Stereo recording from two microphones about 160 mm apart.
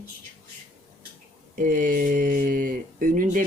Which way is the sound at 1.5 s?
60° right (ahead or behind).